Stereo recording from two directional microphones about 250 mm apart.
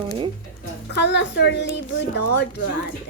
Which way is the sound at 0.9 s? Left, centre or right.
Left.